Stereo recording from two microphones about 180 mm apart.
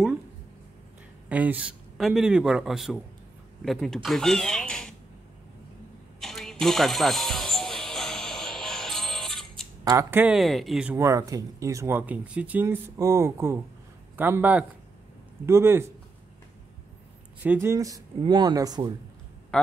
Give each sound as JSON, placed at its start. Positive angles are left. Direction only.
{"t": 1.3, "sound": "a man's voice", "side_deg": -10}
{"t": 6.2, "sound": "a sound", "side_deg": 0}
{"t": 6.6, "sound": "music", "side_deg": 0}
{"t": 9.8, "sound": "a man's voice", "side_deg": -15}
{"t": 11.0, "sound": "speech", "side_deg": -20}
{"t": 17.4, "sound": "speech", "side_deg": -10}
{"t": 19.5, "sound": "a man's voice", "side_deg": 0}